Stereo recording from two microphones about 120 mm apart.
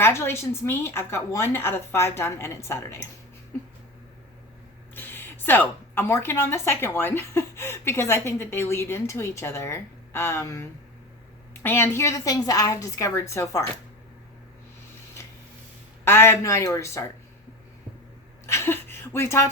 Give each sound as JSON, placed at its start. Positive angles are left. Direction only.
{"t": 0.0, "sound": "a woman's voice", "side_deg": 20}
{"t": 4.9, "sound": "a woman's voice", "side_deg": 15}
{"t": 16.0, "sound": "a woman's voice", "side_deg": 20}
{"t": 18.4, "sound": "speech", "side_deg": 20}